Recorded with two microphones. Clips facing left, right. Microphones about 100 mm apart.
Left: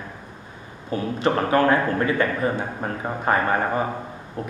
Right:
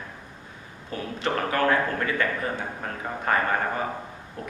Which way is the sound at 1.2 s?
25° left (ahead or behind).